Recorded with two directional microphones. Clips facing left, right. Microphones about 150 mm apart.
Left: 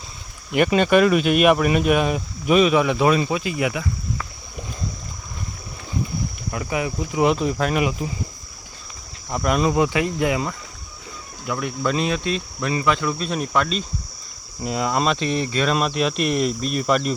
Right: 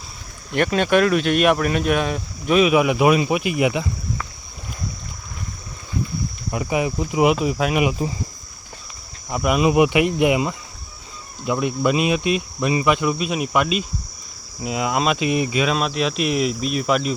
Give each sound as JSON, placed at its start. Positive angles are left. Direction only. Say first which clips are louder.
{"t": 0.5, "sound": "speech", "louder": "left 1 dB", "side_deg": 5}
{"t": 2.6, "sound": "speech", "louder": "right 2 dB", "side_deg": -10}
{"t": 6.5, "sound": "cricket", "louder": "right 4 dB", "side_deg": -20}
{"t": 9.3, "sound": "speech", "louder": "right 2 dB", "side_deg": -5}